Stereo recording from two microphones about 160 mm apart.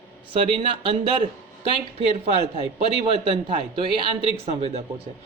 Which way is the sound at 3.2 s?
35° right (ahead or behind).